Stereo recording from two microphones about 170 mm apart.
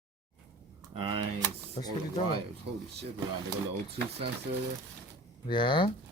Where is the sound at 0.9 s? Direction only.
30° right (ahead or behind).